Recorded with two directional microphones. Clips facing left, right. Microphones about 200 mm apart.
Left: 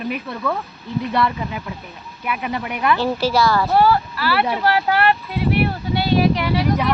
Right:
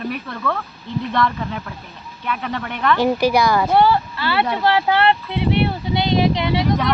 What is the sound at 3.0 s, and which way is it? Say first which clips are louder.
Speech: right 4 dB; 15° right (ahead or behind).